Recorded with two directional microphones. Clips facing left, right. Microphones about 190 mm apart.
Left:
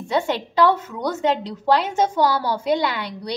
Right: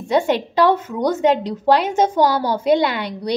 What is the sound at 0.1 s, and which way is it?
Speech, 20° right (ahead or behind).